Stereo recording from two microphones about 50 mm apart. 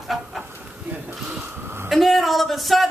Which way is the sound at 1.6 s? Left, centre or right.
Right.